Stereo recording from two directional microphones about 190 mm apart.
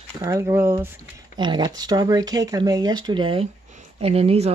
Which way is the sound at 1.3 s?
25° right (ahead or behind).